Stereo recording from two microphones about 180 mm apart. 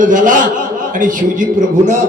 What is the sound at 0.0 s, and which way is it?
A man's voice, 45° right (ahead or behind).